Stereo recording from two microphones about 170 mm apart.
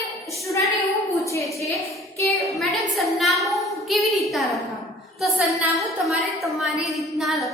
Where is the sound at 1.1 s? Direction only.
20° left (ahead or behind).